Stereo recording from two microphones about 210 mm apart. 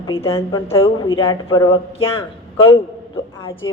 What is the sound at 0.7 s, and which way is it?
A man's voice, 25° left (ahead or behind).